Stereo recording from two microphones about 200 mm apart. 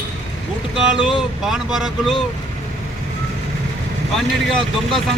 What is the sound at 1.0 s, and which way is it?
Speech, centre (ahead or behind).